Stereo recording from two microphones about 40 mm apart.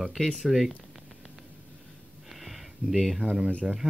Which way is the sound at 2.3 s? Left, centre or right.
Centre.